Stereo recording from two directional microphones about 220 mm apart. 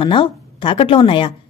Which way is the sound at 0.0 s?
25° left (ahead or behind).